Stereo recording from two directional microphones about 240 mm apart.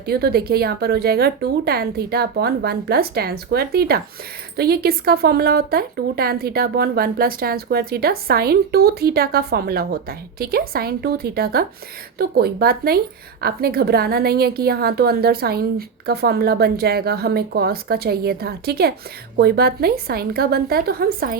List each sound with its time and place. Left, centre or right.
0.0 s speech: right